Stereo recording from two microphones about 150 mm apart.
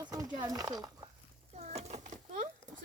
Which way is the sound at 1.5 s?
45° right (ahead or behind).